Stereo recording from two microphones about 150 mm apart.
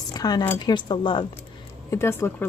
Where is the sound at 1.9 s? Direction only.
20° left (ahead or behind).